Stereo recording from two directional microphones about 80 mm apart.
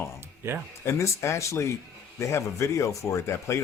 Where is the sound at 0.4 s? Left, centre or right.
Right.